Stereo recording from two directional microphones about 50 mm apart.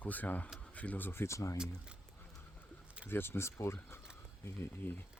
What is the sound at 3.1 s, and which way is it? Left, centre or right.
Speech, left.